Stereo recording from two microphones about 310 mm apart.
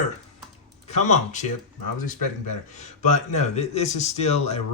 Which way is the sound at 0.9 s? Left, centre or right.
Left.